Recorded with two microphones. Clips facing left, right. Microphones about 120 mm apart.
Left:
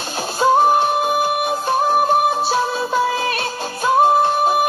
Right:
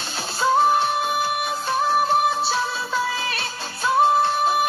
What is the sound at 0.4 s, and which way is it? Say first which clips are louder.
Music: left 4 dB; 50° left (ahead or behind).